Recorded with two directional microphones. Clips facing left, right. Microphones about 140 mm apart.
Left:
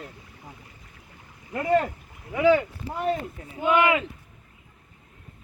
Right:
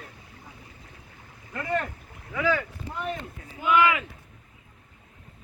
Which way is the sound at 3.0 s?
35° left (ahead or behind).